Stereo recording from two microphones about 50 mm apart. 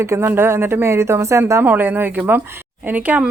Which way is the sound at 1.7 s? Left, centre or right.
Right.